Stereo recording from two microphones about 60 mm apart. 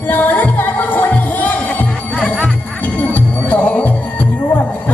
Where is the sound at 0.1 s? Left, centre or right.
Left.